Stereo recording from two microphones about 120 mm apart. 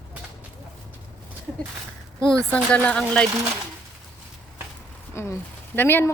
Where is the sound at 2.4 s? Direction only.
10° left (ahead or behind).